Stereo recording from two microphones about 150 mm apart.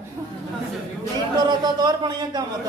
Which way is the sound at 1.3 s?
30° right (ahead or behind).